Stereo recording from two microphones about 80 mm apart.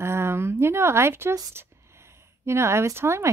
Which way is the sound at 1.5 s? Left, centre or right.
Right.